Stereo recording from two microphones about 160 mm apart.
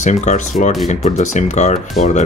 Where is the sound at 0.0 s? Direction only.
50° left (ahead or behind).